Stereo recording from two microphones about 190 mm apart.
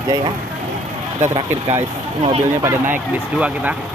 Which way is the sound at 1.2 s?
35° right (ahead or behind).